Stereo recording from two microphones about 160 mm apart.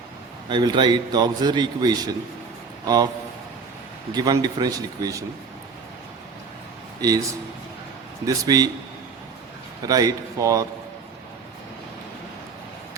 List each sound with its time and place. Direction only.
0.5 s a man's voice: 30° right (ahead or behind)
4.1 s a man's voice: 25° right (ahead or behind)
7.0 s a man's voice: 25° right (ahead or behind)
8.3 s a man's voice: 25° right (ahead or behind)
9.8 s a man's voice: 25° right (ahead or behind)